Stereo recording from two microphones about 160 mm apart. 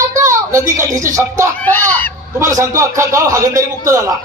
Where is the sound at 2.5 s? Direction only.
20° right (ahead or behind).